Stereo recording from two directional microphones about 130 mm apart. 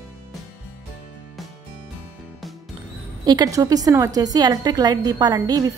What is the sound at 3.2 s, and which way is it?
A woman's voice, 30° right (ahead or behind).